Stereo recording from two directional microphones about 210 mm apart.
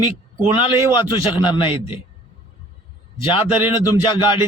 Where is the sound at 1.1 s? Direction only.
20° left (ahead or behind).